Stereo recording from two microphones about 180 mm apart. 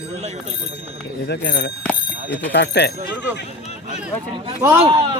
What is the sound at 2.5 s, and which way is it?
Speech, 70° left (ahead or behind).